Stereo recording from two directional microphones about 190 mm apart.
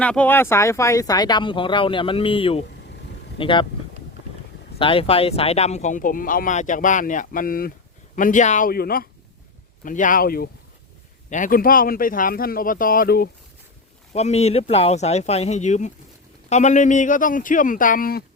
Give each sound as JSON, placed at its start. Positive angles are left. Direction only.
{"t": 0.0, "sound": "speech", "side_deg": 5}
{"t": 4.8, "sound": "speech", "side_deg": 30}
{"t": 14.1, "sound": "speech", "side_deg": 35}